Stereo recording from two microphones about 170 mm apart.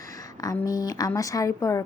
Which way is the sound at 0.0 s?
20° left (ahead or behind).